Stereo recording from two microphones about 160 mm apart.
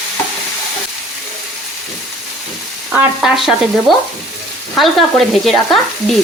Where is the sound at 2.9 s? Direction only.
5° right (ahead or behind).